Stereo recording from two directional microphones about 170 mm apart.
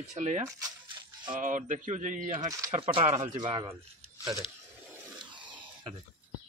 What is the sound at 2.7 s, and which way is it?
Speech, 35° right (ahead or behind).